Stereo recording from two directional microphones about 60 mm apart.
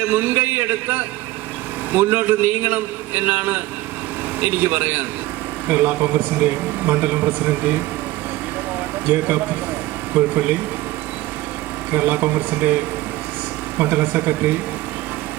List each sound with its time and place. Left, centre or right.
0.1 s a man's voice: right
9.0 s a man's voice: right
11.9 s a man's voice: right